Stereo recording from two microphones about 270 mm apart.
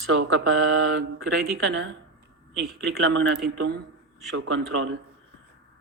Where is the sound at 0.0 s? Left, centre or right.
Right.